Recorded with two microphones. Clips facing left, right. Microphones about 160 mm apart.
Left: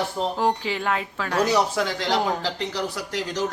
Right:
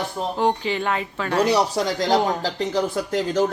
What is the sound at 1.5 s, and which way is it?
Speech, 35° right (ahead or behind).